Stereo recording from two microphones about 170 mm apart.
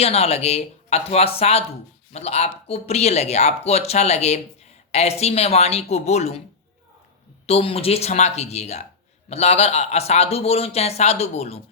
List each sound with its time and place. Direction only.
0.0 s a man's voice: 35° left (ahead or behind)
7.4 s a man's voice: 35° left (ahead or behind)